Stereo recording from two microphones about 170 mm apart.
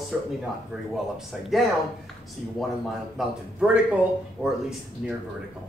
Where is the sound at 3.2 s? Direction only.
5° right (ahead or behind).